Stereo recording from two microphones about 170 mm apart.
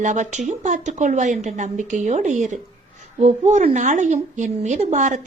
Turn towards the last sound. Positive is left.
turn(degrees=-45)  # may be behind; listen again after turning